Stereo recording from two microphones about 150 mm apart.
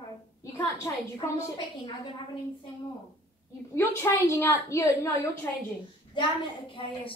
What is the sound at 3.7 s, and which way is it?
A woman's voice, 20° left (ahead or behind).